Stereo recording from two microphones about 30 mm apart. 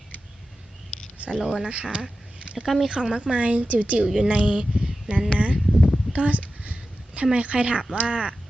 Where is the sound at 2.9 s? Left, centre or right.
Right.